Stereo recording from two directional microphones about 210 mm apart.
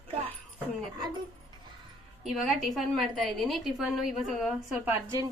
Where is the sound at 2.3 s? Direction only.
Centre (ahead or behind).